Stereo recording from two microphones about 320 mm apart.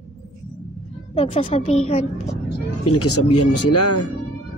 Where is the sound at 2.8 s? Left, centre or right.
Left.